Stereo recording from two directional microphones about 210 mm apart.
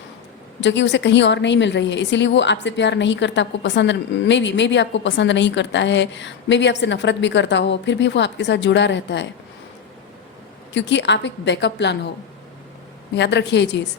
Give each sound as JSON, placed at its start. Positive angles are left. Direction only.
{"t": 0.6, "sound": "a woman's voice", "side_deg": 55}
{"t": 10.8, "sound": "a woman's voice", "side_deg": 55}
{"t": 13.1, "sound": "a woman's voice", "side_deg": 55}